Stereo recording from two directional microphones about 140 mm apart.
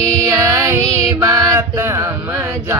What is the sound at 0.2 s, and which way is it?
Music, 20° right (ahead or behind).